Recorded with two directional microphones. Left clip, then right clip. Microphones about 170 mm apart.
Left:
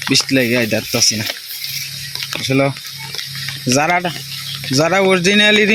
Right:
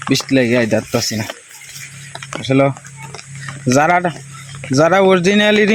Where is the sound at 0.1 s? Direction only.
15° right (ahead or behind).